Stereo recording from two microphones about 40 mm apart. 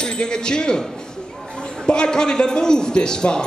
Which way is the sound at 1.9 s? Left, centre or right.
Centre.